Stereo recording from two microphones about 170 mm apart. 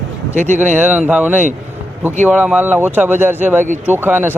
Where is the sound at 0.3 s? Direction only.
45° right (ahead or behind).